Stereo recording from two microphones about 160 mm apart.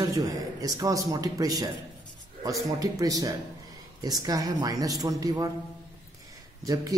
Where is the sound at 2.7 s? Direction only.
20° right (ahead or behind).